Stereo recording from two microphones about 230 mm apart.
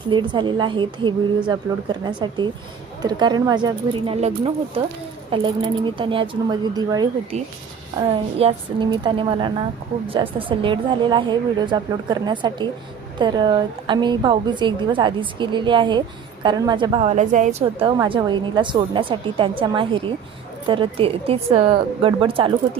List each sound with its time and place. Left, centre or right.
0.1 s a woman's voice: centre
8.4 s a woman's voice: right